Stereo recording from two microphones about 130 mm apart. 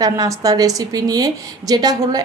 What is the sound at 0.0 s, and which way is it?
A woman's voice, 30° right (ahead or behind).